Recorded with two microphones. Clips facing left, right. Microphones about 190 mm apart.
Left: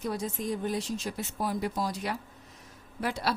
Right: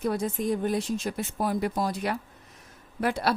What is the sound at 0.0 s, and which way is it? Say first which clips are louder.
A woman's voice: right 5 dB; 55° right (ahead or behind).